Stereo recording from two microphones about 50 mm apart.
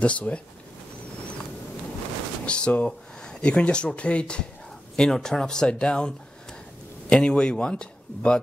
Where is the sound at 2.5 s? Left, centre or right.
Left.